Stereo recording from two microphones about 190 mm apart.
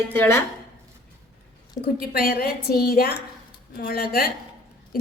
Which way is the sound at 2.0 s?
55° left (ahead or behind).